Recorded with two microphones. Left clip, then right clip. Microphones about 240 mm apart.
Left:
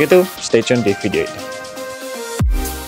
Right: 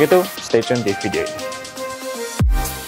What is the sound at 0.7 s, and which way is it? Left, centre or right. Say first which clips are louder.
Speech: left 3 dB; centre.